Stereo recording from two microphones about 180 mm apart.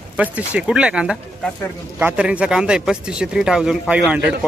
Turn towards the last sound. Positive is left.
turn(degrees=-5)  # may be behind; listen again after turning